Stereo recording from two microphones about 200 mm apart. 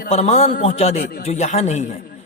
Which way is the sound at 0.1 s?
35° left (ahead or behind).